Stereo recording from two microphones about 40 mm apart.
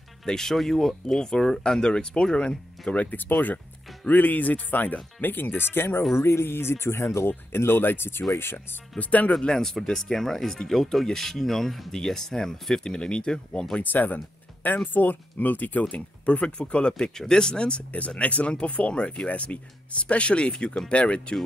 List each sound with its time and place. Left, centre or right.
0.2 s speech: centre
2.9 s speech: left
3.2 s speech: left
6.1 s speech: left
9.4 s speech: centre
9.7 s speech: centre
13.8 s speech: left
15.8 s speech: left